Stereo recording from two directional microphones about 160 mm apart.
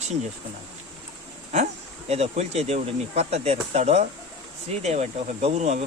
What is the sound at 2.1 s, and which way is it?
Speech, 40° right (ahead or behind).